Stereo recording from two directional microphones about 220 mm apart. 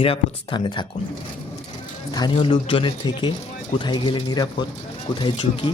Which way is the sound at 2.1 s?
20° left (ahead or behind).